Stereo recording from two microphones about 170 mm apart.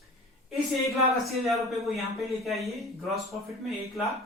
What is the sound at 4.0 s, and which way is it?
Speech, centre (ahead or behind).